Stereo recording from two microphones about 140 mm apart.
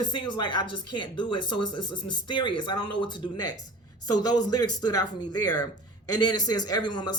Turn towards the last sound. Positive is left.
turn(degrees=30)  # may be behind; listen again after turning